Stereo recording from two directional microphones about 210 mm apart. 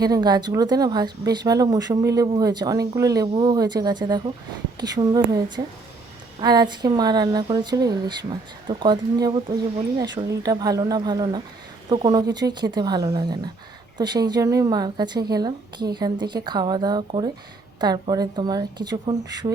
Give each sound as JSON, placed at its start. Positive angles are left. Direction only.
{"t": 0.0, "sound": "speech", "side_deg": -20}